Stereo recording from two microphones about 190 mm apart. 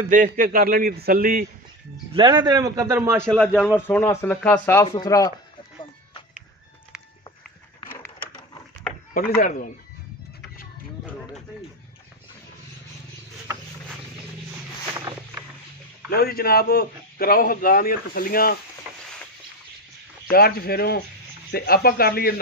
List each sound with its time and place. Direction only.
0.1 s a man's voice: 45° right (ahead or behind)
2.1 s a man's voice: 20° right (ahead or behind)
3.2 s a man's voice: 5° left (ahead or behind)
4.8 s speech: 25° left (ahead or behind)
9.3 s a man's voice: 45° left (ahead or behind)
15.0 s vehicle: 20° right (ahead or behind)
16.1 s a man's voice: 55° left (ahead or behind)
20.2 s a man's voice: 55° left (ahead or behind)